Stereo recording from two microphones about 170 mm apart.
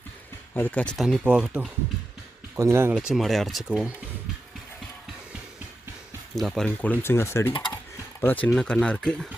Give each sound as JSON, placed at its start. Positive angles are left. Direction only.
{"t": 0.5, "sound": "speech", "side_deg": 10}
{"t": 6.3, "sound": "speech", "side_deg": 0}
{"t": 7.5, "sound": "speech", "side_deg": 30}
{"t": 8.2, "sound": "speech", "side_deg": 10}